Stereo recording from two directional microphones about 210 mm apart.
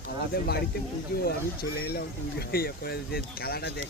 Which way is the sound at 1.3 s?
50° left (ahead or behind).